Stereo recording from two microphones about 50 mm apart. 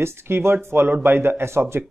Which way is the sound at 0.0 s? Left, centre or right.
Right.